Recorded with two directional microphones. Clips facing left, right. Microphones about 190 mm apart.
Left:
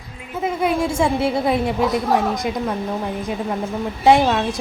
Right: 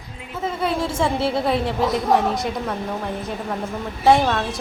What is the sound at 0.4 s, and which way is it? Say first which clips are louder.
A woman's voice: left 3 dB; 15° left (ahead or behind).